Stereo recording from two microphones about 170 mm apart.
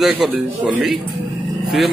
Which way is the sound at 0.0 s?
5° right (ahead or behind).